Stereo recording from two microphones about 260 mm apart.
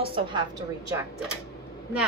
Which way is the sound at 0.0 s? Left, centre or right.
Centre.